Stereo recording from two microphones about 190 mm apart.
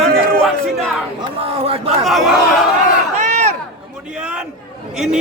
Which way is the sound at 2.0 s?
Centre (ahead or behind).